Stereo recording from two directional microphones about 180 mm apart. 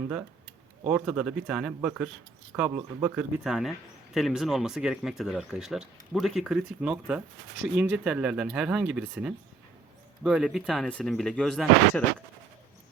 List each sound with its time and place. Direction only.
0.9 s speech: 5° right (ahead or behind)